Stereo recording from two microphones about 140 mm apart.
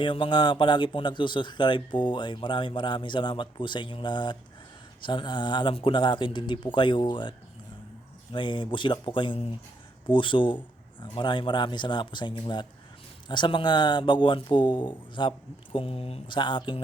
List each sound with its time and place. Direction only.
0.0 s speech: 35° left (ahead or behind)